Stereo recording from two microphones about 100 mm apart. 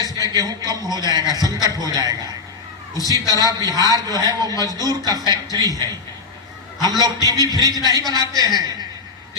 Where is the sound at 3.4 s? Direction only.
40° right (ahead or behind).